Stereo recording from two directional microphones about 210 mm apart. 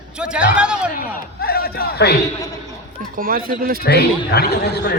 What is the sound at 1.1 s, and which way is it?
Speech, 45° left (ahead or behind).